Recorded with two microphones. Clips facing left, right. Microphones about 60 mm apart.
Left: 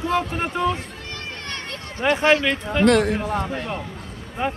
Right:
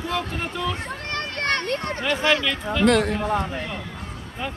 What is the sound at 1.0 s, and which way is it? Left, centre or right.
Children playing, right.